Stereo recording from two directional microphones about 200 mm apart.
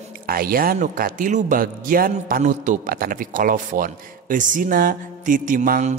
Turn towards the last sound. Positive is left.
turn(degrees=-40)  # may be behind; listen again after turning